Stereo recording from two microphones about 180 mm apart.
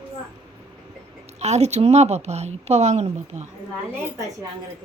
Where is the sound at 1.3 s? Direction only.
40° right (ahead or behind).